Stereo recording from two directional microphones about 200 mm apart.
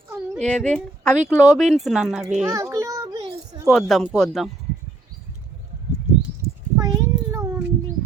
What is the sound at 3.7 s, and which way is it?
Speech, centre (ahead or behind).